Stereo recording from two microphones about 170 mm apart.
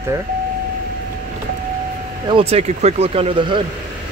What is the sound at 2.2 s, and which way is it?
Speech, 35° right (ahead or behind).